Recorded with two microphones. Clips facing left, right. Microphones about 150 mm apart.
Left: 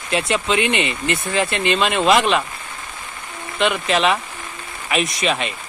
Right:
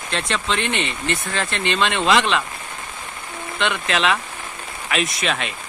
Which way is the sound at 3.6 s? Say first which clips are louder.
Left 4 dB; 5° left (ahead or behind).